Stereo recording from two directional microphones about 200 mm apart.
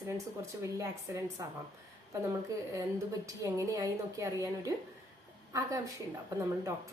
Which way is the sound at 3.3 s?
15° right (ahead or behind).